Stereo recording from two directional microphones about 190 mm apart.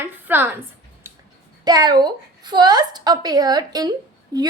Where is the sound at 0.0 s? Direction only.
10° right (ahead or behind).